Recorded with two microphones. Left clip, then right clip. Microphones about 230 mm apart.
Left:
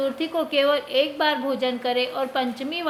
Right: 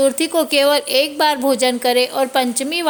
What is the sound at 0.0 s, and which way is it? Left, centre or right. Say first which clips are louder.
A woman's voice: right 9 dB; right.